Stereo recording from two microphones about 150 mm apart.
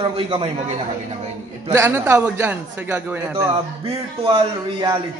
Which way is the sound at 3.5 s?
35° right (ahead or behind).